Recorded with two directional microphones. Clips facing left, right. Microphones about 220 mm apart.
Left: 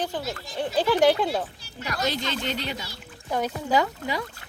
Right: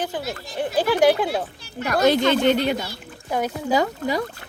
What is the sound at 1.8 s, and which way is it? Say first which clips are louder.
Speech: right 10 dB; 55° right (ahead or behind).